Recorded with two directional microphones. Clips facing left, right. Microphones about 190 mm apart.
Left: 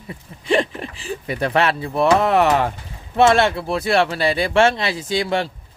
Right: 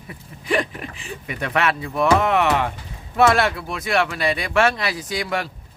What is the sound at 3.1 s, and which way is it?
Speech, 25° left (ahead or behind).